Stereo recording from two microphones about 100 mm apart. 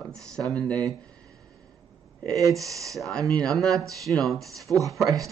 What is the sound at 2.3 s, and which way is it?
Speech, 35° right (ahead or behind).